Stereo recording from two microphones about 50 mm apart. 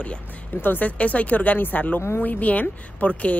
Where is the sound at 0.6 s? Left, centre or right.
Left.